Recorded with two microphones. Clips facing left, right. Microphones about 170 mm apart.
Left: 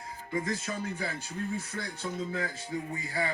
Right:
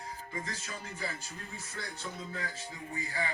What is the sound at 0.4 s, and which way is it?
Speech, 55° left (ahead or behind).